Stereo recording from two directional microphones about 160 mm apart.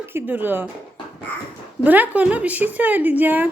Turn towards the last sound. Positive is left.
turn(degrees=-10)  # may be behind; listen again after turning